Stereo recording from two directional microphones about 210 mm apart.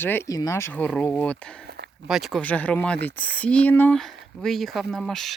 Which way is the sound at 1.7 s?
50° right (ahead or behind).